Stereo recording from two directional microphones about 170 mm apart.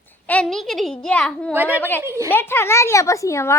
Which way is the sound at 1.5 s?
10° right (ahead or behind).